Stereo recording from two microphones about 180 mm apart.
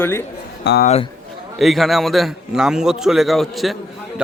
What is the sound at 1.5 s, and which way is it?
A man's voice, centre (ahead or behind).